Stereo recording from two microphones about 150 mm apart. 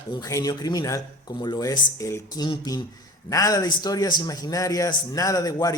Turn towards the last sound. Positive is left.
turn(degrees=25)  # may be behind; listen again after turning